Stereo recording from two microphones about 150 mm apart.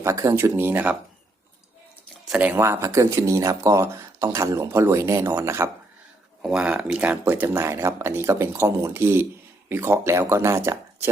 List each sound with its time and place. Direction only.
0.0 s speech: 20° right (ahead or behind)
2.3 s speech: 10° right (ahead or behind)
6.4 s speech: 5° right (ahead or behind)